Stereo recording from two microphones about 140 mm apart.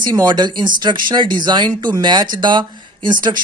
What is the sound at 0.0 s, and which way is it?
Speech, 30° right (ahead or behind).